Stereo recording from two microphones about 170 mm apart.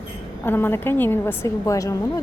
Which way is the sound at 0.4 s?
10° left (ahead or behind).